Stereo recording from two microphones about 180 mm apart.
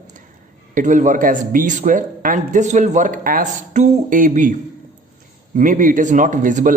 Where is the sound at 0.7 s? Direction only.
45° right (ahead or behind).